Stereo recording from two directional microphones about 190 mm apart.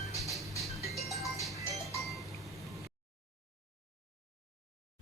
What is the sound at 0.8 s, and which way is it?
Music, centre (ahead or behind).